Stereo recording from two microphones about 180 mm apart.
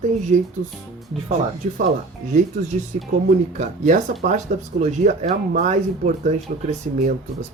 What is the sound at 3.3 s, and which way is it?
Speech, 40° right (ahead or behind).